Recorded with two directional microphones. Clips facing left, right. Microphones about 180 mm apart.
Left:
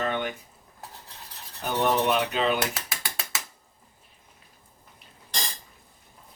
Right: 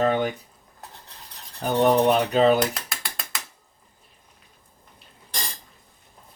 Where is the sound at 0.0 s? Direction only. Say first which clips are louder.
Right 7 dB; 40° right (ahead or behind).